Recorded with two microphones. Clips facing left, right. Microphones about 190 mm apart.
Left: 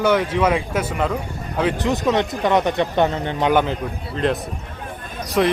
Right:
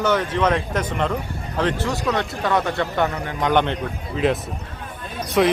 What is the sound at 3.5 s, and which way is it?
A man's voice, 5° left (ahead or behind).